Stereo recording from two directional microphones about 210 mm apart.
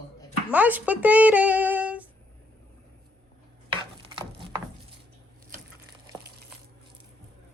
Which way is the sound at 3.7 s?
25° right (ahead or behind).